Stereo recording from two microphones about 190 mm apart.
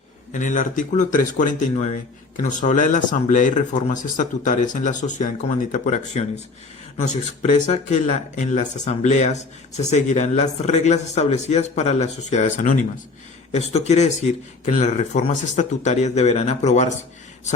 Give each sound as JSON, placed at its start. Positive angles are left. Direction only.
{"t": 0.3, "sound": "speech", "side_deg": 40}